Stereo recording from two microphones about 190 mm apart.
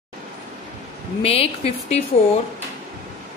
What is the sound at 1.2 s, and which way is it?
Speech, 30° left (ahead or behind).